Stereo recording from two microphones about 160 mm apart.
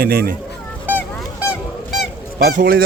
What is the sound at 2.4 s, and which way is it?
Speech, 75° right (ahead or behind).